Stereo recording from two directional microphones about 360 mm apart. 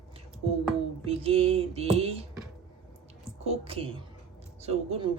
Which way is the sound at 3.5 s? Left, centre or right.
Centre.